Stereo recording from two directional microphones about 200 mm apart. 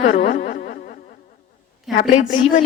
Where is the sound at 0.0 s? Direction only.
35° left (ahead or behind).